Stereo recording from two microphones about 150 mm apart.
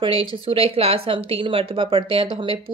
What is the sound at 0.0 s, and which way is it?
Speech, 35° right (ahead or behind).